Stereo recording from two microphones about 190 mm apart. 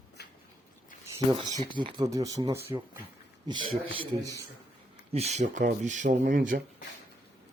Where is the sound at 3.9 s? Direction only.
25° right (ahead or behind); by 6.5 s 45° right (ahead or behind).